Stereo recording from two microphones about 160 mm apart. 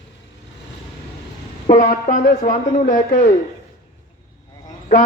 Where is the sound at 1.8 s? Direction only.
55° left (ahead or behind).